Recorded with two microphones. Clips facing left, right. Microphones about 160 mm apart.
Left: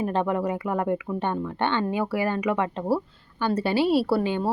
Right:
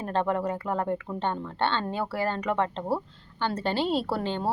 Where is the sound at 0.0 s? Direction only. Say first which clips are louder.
Left 2 dB; 15° left (ahead or behind).